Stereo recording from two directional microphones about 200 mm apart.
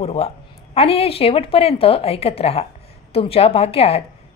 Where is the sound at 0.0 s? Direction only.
30° left (ahead or behind).